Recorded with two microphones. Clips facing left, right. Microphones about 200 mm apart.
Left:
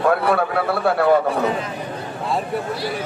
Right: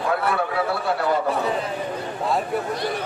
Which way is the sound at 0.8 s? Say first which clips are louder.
Left 10 dB; 60° left (ahead or behind).